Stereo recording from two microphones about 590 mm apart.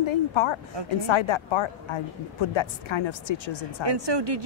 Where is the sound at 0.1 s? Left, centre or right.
Left.